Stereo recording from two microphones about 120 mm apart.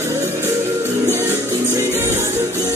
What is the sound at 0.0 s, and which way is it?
Music, 20° right (ahead or behind).